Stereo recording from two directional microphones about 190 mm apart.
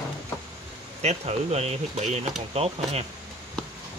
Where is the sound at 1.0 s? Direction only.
35° right (ahead or behind).